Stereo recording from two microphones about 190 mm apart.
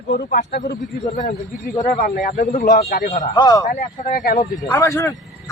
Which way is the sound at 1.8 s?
45° left (ahead or behind).